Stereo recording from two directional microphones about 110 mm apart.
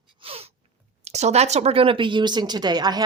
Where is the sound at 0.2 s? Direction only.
60° right (ahead or behind).